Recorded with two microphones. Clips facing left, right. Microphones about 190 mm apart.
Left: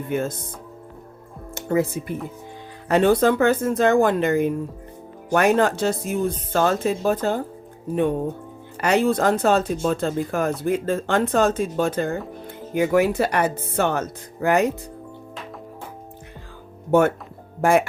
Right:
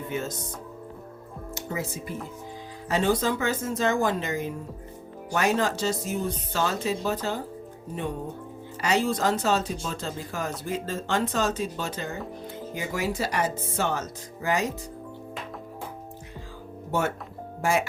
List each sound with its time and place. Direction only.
0.1 s speech: 55° left (ahead or behind)
1.5 s speech: 55° left (ahead or behind)
8.8 s speech: 55° left (ahead or behind)
17.6 s speech: 55° left (ahead or behind)